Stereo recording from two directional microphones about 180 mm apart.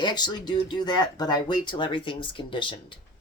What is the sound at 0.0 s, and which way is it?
Speech, 25° left (ahead or behind).